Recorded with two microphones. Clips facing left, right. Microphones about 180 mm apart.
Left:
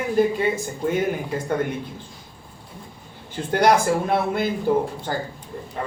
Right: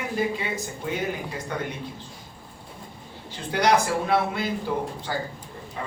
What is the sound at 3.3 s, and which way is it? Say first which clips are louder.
A man's voice: left 4 dB; 50° left (ahead or behind).